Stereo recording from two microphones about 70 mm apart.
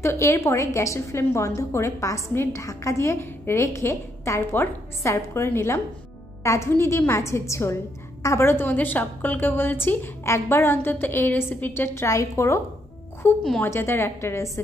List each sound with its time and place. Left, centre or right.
0.0 s a woman's voice: left
8.5 s a woman's voice: left
13.2 s a woman's voice: left